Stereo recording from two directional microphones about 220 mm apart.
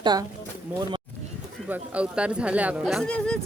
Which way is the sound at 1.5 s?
5° right (ahead or behind).